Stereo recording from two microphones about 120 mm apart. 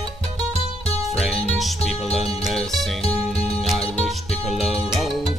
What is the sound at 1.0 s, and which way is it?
Music, centre (ahead or behind).